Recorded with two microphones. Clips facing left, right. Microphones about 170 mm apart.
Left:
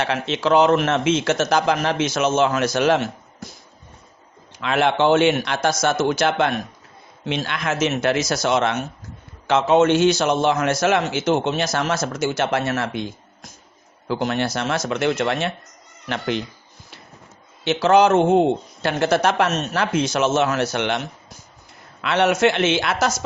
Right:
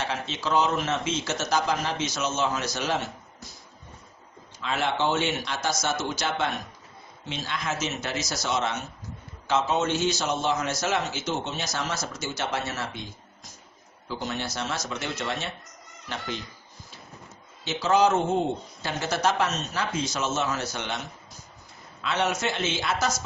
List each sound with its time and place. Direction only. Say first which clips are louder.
0.0 s speech: left 9 dB; 70° left (ahead or behind); by 2.6 s 85° left
2.6 s speech: left 10 dB; 70° left (ahead or behind); by 3.5 s 90° left
4.6 s speech: left 8 dB; 70° left (ahead or behind)
5.6 s speech: left 9 dB; 55° left (ahead or behind)
7.3 s speech: left 7 dB; 70° left (ahead or behind)
11.1 s speech: left 10 dB; 90° left; by 11.9 s 75° left (ahead or behind)
11.9 s speech: left 10 dB; 60° left (ahead or behind)
14.1 s speech: left 10 dB; 70° left (ahead or behind)
17.6 s speech: left 7 dB; 70° left (ahead or behind)